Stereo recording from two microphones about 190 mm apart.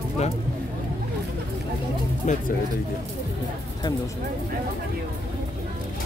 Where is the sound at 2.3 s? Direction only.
40° left (ahead or behind).